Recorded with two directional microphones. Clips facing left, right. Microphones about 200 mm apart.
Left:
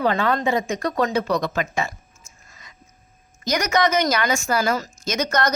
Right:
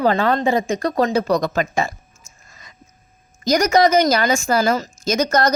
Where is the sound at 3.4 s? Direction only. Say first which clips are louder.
Right 6 dB; 35° right (ahead or behind).